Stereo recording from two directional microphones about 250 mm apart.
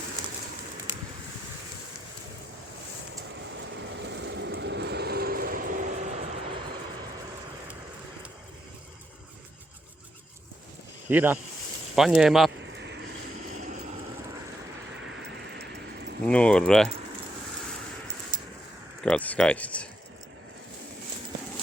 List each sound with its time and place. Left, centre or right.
3.3 s vehicle: right
11.1 s speech: centre
12.7 s a sound: right
13.6 s vehicle: right
16.2 s speech: centre
18.3 s a sound: centre
19.0 s speech: centre